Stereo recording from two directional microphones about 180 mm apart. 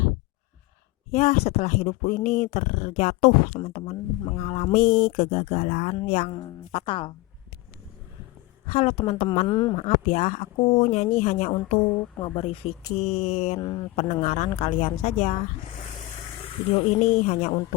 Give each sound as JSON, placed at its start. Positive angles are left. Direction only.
{"t": 1.1, "sound": "speech", "side_deg": 35}
{"t": 6.3, "sound": "speech", "side_deg": 30}
{"t": 8.6, "sound": "speech", "side_deg": 35}
{"t": 9.5, "sound": "speech", "side_deg": 25}
{"t": 9.8, "sound": "speech", "side_deg": 40}
{"t": 13.6, "sound": "speech", "side_deg": 25}
{"t": 13.9, "sound": "speech", "side_deg": 35}
{"t": 16.7, "sound": "speech", "side_deg": 40}